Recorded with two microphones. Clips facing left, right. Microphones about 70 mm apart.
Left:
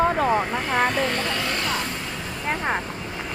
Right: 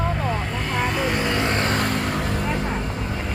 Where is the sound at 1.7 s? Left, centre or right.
Right.